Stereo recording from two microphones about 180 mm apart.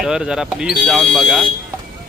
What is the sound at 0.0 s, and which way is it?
Speech, 5° right (ahead or behind).